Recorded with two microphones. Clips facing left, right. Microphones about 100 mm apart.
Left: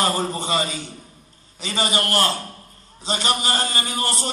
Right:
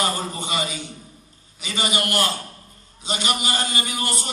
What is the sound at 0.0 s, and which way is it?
A man's voice, 35° left (ahead or behind).